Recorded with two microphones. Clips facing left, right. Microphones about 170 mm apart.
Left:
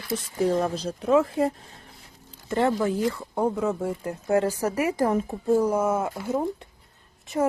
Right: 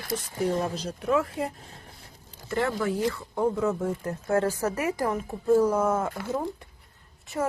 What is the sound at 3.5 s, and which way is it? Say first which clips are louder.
A woman's voice: even; 10° left (ahead or behind).